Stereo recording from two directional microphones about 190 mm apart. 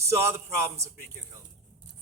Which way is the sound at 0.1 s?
15° right (ahead or behind).